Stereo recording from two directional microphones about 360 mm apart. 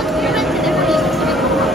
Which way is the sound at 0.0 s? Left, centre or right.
Centre.